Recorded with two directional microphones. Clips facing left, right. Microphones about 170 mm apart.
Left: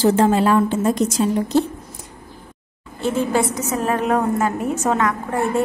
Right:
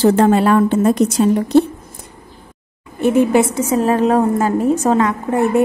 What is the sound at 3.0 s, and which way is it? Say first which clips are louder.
A woman's voice: right 7 dB; 20° right (ahead or behind).